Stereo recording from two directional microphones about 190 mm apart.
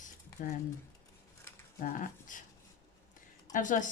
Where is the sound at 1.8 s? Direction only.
45° left (ahead or behind).